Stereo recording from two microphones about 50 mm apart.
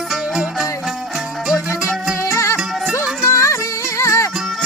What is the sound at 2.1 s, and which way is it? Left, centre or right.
Music, left.